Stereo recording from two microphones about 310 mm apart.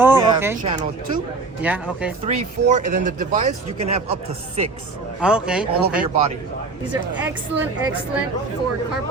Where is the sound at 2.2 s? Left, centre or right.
Right.